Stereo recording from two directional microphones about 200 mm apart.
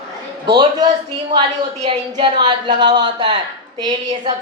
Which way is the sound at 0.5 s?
20° right (ahead or behind).